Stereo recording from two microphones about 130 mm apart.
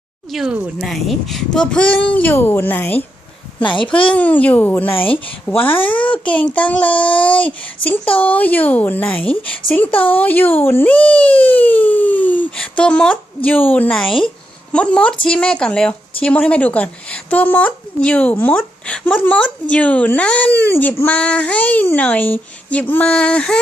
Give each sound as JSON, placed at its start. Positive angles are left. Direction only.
{"t": 0.3, "sound": "a woman's voice", "side_deg": -5}
{"t": 3.6, "sound": "a child's voice", "side_deg": 40}
{"t": 3.9, "sound": "a woman's voice", "side_deg": 10}
{"t": 7.8, "sound": "a child's voice", "side_deg": 40}
{"t": 8.2, "sound": "a woman's voice", "side_deg": 10}